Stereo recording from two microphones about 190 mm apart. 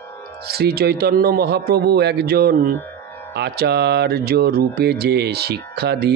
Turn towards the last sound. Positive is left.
turn(degrees=-60)  # may be behind; listen again after turning